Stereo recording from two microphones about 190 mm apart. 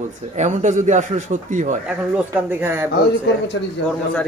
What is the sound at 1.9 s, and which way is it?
Speech, 10° right (ahead or behind).